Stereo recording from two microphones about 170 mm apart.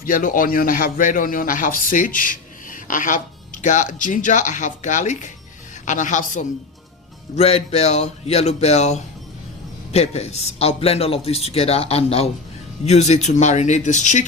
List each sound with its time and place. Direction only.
0.0 s a man's voice: 55° left (ahead or behind)
7.3 s a man's voice: 35° left (ahead or behind)